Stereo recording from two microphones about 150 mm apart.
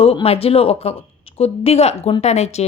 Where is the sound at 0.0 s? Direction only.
40° left (ahead or behind).